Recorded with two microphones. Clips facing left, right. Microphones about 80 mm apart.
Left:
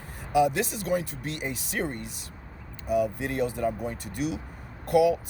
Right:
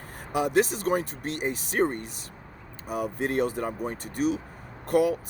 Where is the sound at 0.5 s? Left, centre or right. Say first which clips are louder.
Right 4 dB; right.